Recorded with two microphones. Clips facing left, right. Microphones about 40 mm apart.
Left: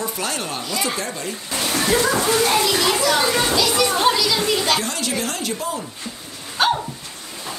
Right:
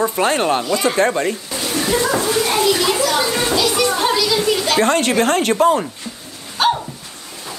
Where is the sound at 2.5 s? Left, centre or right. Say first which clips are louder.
Right 3 dB; right.